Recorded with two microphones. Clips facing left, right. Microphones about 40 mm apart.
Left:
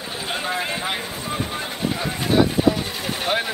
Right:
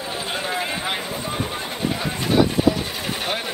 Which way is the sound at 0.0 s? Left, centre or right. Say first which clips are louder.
Even; centre.